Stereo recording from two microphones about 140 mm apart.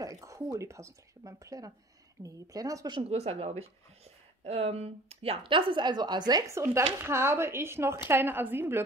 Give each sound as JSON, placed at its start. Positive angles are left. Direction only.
{"t": 0.0, "sound": "speech", "side_deg": -25}
{"t": 3.1, "sound": "a woman's voice", "side_deg": -45}